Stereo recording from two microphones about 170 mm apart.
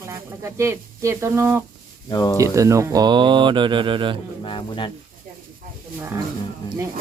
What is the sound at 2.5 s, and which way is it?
Speech, 20° right (ahead or behind).